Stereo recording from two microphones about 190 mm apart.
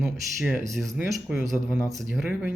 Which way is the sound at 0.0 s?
10° right (ahead or behind).